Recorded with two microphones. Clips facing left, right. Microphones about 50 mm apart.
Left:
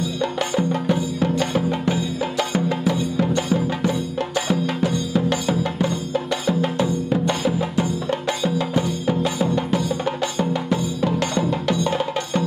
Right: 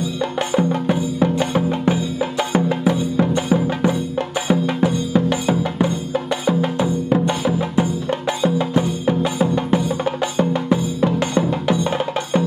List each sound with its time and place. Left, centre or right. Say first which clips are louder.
0.2 s music: right 3 dB; centre
5.3 s music: right 2 dB; centre